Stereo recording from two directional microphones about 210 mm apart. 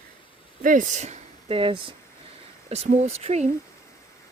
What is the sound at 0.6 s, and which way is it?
Speech, 40° right (ahead or behind).